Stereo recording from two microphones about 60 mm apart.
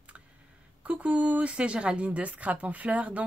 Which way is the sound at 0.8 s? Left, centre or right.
Right.